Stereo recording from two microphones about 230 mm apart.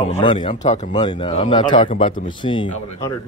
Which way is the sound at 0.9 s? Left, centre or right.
Centre.